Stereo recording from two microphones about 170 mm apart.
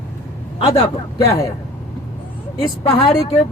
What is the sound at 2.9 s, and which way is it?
Speech, 35° left (ahead or behind).